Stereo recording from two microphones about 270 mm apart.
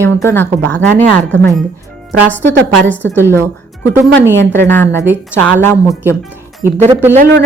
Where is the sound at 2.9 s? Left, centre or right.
Centre.